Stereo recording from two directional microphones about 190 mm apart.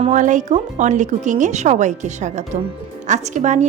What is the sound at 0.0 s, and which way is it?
A woman's voice, 40° right (ahead or behind).